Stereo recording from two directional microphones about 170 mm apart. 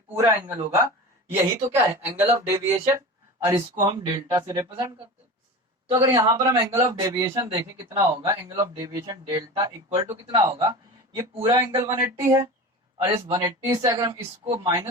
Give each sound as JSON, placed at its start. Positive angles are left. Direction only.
{"t": 0.2, "sound": "speech", "side_deg": -15}
{"t": 13.1, "sound": "speech", "side_deg": -30}